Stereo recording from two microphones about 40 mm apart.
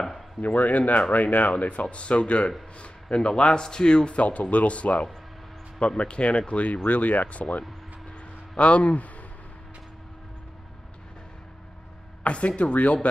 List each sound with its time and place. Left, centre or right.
0.6 s speech: left
12.2 s speech: left